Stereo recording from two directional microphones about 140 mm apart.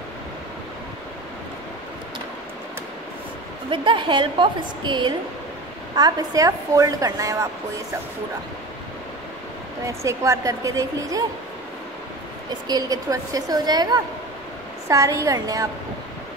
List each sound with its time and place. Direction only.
3.7 s a woman's voice: 35° right (ahead or behind)
9.8 s a woman's voice: 20° right (ahead or behind)
12.6 s a woman's voice: 25° right (ahead or behind)